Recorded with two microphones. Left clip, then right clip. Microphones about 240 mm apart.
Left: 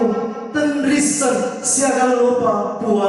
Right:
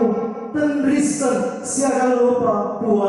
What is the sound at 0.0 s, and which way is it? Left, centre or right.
Music, centre.